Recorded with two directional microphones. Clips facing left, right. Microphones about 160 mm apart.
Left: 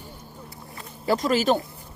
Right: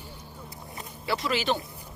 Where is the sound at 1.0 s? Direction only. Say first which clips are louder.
Left 6 dB; 45° left (ahead or behind).